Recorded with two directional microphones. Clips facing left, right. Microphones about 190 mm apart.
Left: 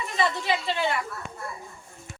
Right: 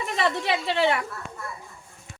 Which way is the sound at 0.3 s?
65° right (ahead or behind).